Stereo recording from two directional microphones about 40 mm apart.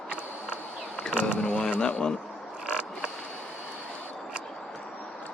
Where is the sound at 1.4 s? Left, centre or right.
Left.